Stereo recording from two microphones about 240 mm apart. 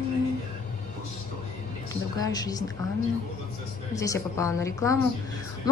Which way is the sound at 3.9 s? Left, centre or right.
Centre.